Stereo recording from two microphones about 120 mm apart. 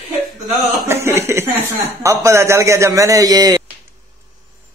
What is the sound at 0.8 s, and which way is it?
Speech, 20° right (ahead or behind).